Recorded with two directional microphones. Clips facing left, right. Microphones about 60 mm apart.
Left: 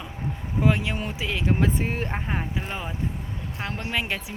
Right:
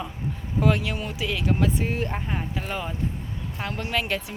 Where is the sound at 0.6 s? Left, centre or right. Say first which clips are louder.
Even; left.